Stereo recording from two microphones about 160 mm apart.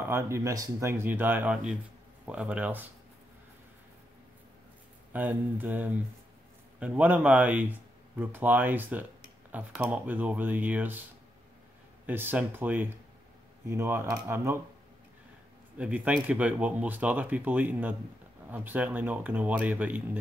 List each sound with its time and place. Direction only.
0.0 s speech: 15° right (ahead or behind)
5.1 s speech: 10° right (ahead or behind)
12.1 s speech: 10° right (ahead or behind)
15.8 s speech: 10° right (ahead or behind)